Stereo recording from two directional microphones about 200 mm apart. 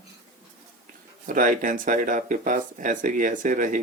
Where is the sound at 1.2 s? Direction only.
40° right (ahead or behind).